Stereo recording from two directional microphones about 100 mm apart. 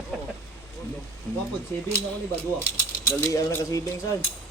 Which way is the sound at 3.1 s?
30° left (ahead or behind).